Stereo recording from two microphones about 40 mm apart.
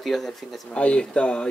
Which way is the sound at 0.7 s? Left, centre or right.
Left.